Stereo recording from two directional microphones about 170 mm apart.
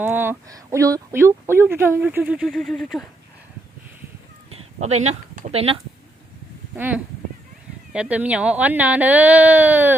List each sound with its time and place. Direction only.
0.0 s a woman's voice: 10° right (ahead or behind)
4.5 s speech: 40° right (ahead or behind)
6.7 s a woman's voice: 10° right (ahead or behind)